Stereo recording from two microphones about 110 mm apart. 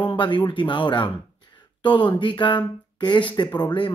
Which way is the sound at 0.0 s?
50° left (ahead or behind).